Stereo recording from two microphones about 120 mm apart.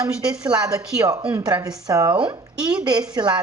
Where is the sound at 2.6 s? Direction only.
10° right (ahead or behind).